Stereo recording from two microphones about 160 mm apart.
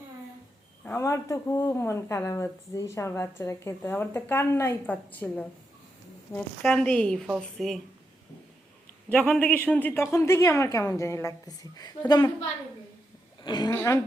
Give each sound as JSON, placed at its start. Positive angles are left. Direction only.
{"t": 0.9, "sound": "speech", "side_deg": 20}
{"t": 9.0, "sound": "a woman's voice", "side_deg": 10}
{"t": 13.4, "sound": "a woman's voice", "side_deg": 25}